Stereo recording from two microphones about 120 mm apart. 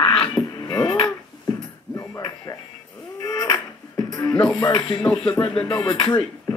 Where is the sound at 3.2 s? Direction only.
35° left (ahead or behind).